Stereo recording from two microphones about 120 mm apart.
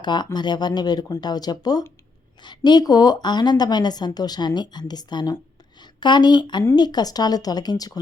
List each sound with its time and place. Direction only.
0.0 s a woman's voice: 40° left (ahead or behind)